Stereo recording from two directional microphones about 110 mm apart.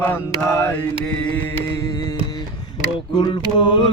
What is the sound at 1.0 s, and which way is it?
Mantra, 10° left (ahead or behind).